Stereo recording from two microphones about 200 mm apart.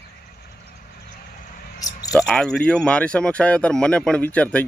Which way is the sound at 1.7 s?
20° left (ahead or behind).